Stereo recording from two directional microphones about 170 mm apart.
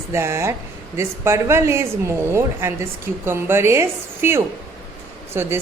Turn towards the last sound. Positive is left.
turn(degrees=-15)  # may be behind; listen again after turning